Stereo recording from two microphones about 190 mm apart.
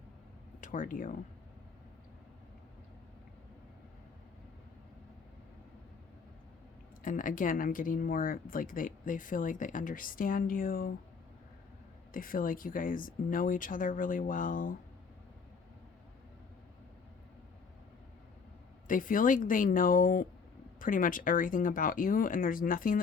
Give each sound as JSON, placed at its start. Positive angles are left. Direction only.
{"t": 0.6, "sound": "speech", "side_deg": 45}
{"t": 7.0, "sound": "speech", "side_deg": 45}
{"t": 12.1, "sound": "speech", "side_deg": 45}
{"t": 18.9, "sound": "speech", "side_deg": 45}